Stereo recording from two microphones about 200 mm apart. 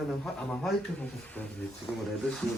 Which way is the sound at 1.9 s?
15° left (ahead or behind).